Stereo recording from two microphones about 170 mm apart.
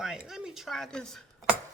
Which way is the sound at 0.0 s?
5° right (ahead or behind).